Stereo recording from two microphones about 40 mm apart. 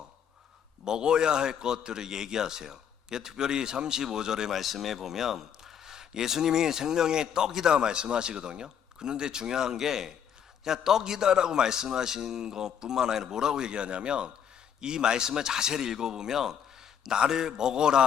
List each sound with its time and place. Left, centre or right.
0.9 s speech: centre
4.5 s speech: centre